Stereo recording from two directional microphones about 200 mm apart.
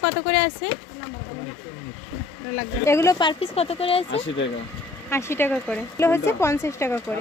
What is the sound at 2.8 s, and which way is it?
Speech, 15° left (ahead or behind).